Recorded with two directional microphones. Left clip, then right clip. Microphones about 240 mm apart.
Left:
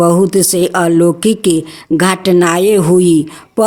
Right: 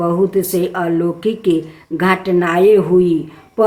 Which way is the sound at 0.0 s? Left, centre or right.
Left.